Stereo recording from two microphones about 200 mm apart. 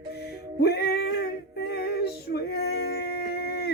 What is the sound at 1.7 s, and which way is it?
Female singing, 55° left (ahead or behind).